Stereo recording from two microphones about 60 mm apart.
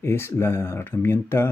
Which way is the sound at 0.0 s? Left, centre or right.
Left.